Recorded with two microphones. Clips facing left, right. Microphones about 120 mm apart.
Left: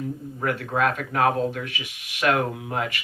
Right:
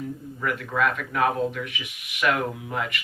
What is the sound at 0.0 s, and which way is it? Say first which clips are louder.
Speech: left 2 dB; 30° left (ahead or behind).